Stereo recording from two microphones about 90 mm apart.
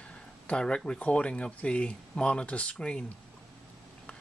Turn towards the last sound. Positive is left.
turn(degrees=10)  # may be behind; listen again after turning